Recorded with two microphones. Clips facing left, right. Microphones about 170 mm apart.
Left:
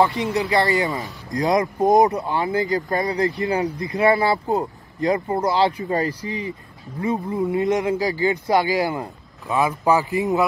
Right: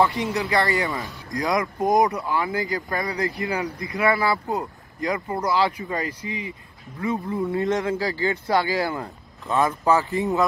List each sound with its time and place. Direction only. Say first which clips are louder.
0.0 s speech: left 2 dB; 25° left (ahead or behind)
7.0 s speech: left 3 dB; 20° left (ahead or behind)